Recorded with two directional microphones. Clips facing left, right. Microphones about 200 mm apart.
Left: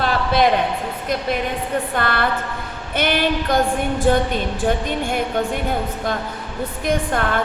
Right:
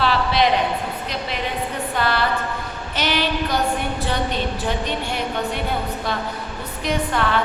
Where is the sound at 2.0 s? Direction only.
55° left (ahead or behind).